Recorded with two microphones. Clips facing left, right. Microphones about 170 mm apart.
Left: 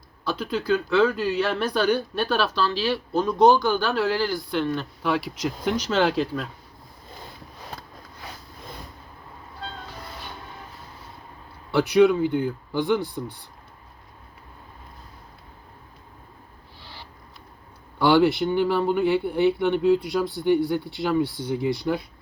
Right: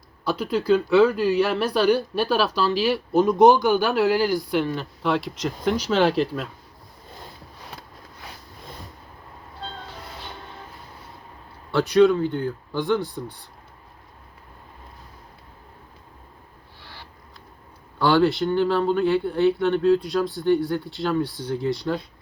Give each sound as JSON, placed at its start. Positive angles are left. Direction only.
{"t": 0.3, "sound": "speech", "side_deg": 0}
{"t": 4.6, "sound": "speech", "side_deg": 0}
{"t": 11.7, "sound": "speech", "side_deg": 10}
{"t": 18.0, "sound": "speech", "side_deg": 15}